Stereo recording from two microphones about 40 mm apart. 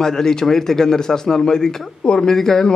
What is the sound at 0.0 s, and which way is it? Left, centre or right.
A man's voice, centre.